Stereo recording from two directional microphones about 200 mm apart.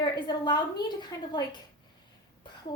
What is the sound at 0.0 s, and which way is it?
Speech, 20° left (ahead or behind).